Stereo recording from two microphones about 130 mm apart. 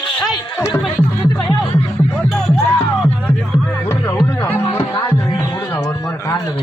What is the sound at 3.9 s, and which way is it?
Music, 20° left (ahead or behind).